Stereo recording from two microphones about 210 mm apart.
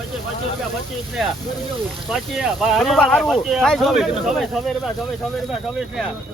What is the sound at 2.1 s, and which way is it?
Speech, centre (ahead or behind).